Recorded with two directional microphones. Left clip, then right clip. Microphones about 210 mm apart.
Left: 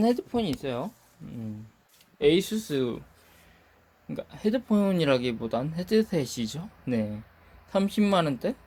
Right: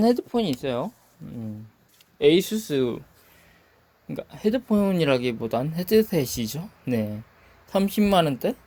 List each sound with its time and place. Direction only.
0.0 s speech: 25° right (ahead or behind)
2.1 s speech: 20° right (ahead or behind)
4.1 s speech: 20° right (ahead or behind)